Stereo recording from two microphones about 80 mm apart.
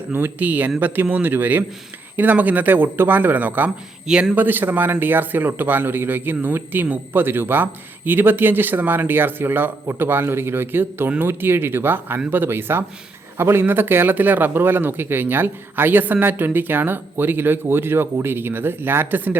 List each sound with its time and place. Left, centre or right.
0.1 s speech: right
4.0 s a man's voice: centre
4.4 s speech: right